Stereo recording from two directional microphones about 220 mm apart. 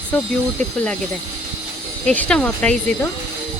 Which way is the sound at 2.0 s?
5° left (ahead or behind).